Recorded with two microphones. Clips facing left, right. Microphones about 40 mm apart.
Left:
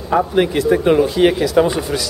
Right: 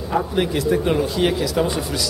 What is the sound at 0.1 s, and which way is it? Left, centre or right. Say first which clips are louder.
A man's voice: left 6 dB; centre.